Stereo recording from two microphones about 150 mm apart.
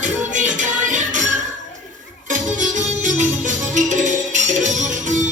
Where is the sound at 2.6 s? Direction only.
55° right (ahead or behind).